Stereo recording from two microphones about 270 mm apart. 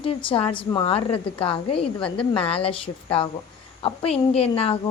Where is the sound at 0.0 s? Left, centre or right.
Centre.